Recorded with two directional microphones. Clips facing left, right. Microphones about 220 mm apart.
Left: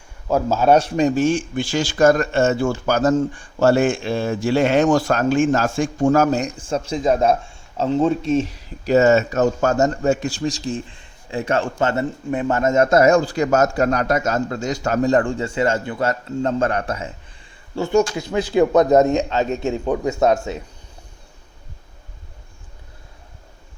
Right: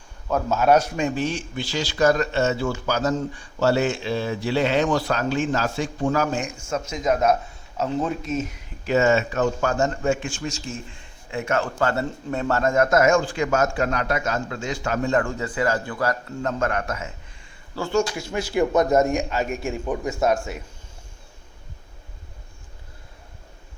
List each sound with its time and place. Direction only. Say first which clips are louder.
0.3 s a man's voice: left 3 dB; 25° left (ahead or behind)